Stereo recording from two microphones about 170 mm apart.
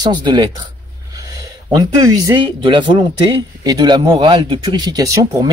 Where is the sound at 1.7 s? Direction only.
20° right (ahead or behind).